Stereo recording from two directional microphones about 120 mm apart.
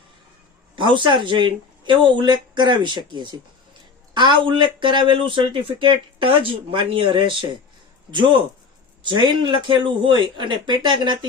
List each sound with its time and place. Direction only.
0.8 s a man's voice: 40° right (ahead or behind)